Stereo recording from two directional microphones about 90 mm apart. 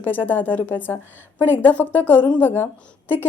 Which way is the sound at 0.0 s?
20° left (ahead or behind).